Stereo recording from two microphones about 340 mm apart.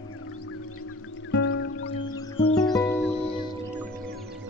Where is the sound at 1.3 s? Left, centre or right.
Left.